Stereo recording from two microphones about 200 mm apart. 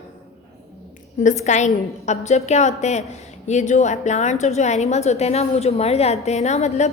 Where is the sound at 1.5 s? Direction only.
35° left (ahead or behind).